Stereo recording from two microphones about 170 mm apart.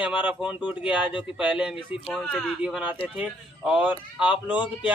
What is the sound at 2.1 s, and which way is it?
A man's voice, centre (ahead or behind).